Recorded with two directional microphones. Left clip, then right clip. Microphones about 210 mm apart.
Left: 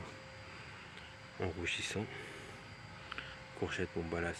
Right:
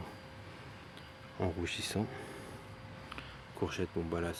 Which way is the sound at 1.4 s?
30° right (ahead or behind).